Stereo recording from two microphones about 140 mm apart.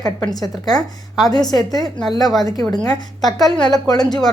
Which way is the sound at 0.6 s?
25° left (ahead or behind).